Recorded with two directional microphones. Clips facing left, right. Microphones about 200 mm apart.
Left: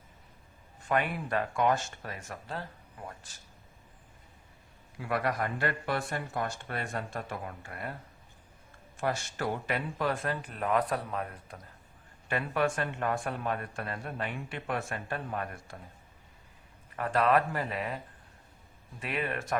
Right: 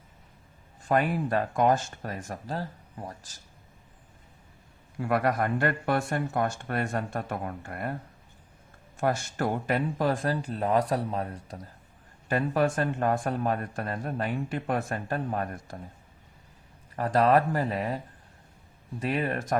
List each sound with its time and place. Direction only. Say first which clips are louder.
0.9 s speech: right 5 dB; 40° right (ahead or behind)
4.9 s speech: right 5 dB; 45° right (ahead or behind)
9.0 s speech: right 5 dB; 50° right (ahead or behind)
16.9 s speech: right 4 dB; 35° right (ahead or behind)